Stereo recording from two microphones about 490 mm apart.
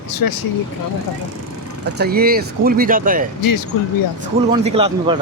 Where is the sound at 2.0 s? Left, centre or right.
Centre.